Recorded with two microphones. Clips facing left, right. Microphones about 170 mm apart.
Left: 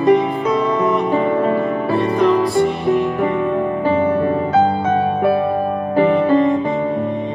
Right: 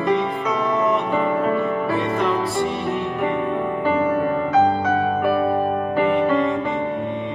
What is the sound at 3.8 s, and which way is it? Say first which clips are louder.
Music: left 3 dB; 35° left (ahead or behind).